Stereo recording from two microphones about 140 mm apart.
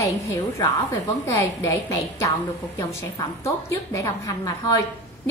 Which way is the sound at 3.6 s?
20° left (ahead or behind).